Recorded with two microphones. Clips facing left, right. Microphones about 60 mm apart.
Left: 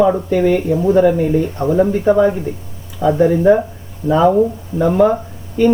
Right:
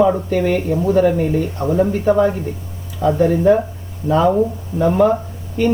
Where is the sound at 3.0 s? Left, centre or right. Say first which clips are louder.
Left 2 dB; centre.